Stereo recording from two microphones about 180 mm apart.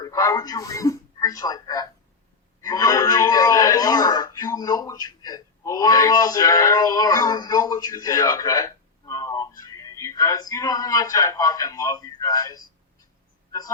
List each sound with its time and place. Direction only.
0.0 s a man's voice: 20° left (ahead or behind)